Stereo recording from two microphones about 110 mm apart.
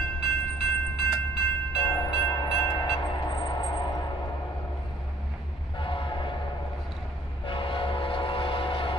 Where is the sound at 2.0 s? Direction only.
35° left (ahead or behind).